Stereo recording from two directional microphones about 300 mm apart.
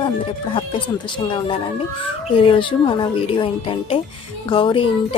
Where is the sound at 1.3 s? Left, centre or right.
Centre.